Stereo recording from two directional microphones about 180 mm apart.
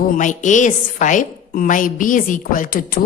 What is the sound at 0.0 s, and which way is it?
A woman's voice, 45° left (ahead or behind).